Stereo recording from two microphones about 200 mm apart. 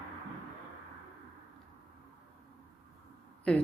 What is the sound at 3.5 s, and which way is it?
Speech, 5° left (ahead or behind).